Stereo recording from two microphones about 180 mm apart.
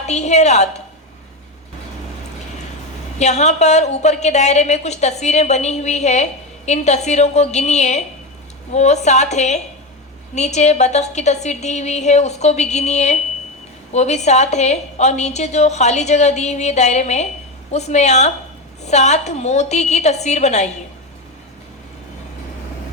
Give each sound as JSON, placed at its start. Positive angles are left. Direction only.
{"t": 0.1, "sound": "a woman's voice", "side_deg": 40}
{"t": 3.2, "sound": "a woman's voice", "side_deg": 40}